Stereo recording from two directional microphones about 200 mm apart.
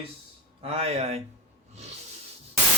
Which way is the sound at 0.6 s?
30° right (ahead or behind).